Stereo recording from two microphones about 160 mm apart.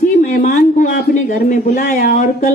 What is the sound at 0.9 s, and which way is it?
Speech, 60° left (ahead or behind).